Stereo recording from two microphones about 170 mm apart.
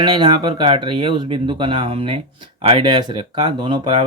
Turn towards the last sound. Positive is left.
turn(degrees=-30)  # may be behind; listen again after turning